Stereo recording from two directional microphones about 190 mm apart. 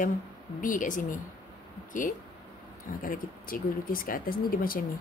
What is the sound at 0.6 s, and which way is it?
Speech, 45° left (ahead or behind).